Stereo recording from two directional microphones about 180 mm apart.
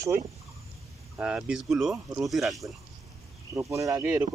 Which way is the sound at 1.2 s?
5° right (ahead or behind).